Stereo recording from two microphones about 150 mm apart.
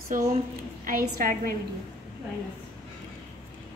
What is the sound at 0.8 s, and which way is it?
Speech, 75° right (ahead or behind).